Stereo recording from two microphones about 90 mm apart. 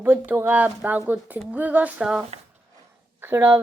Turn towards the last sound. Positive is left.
turn(degrees=-25)  # may be behind; listen again after turning